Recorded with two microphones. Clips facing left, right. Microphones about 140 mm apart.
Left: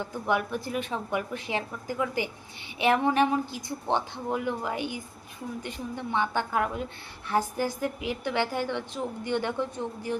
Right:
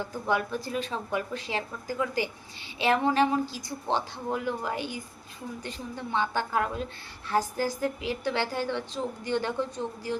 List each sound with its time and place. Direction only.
0.0 s a woman's voice: 20° left (ahead or behind)